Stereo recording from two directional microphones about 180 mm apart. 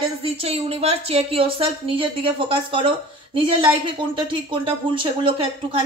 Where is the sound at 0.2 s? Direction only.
35° right (ahead or behind).